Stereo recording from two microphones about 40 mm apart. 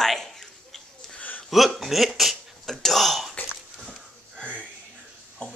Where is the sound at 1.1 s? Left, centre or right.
Left.